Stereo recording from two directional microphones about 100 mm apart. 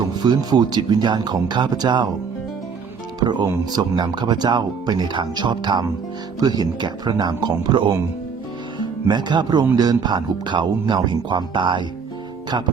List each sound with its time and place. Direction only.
0.1 s speech: 45° right (ahead or behind)
3.2 s speech: 45° right (ahead or behind)